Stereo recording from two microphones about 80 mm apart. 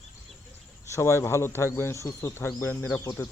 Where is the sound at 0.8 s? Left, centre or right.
Left.